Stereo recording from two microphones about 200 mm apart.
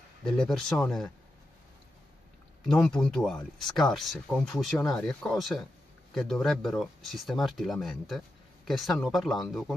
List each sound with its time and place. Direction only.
0.2 s speech: centre (ahead or behind)
2.6 s speech: 5° left (ahead or behind)